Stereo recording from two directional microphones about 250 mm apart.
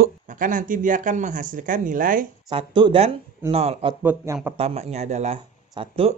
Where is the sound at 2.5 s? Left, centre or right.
Centre.